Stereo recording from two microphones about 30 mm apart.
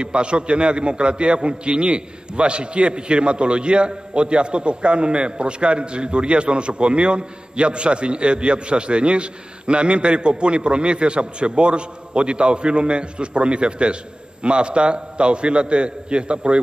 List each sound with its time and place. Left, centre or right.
0.0 s a man's voice: right